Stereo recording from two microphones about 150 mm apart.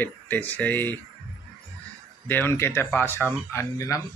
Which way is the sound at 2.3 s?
15° left (ahead or behind).